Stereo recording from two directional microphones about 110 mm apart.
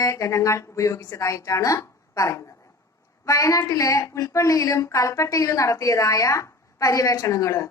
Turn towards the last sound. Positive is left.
turn(degrees=30)  # may be behind; listen again after turning